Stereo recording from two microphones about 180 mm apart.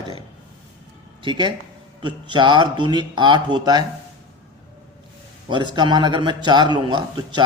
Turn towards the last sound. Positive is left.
turn(degrees=-25)  # may be behind; listen again after turning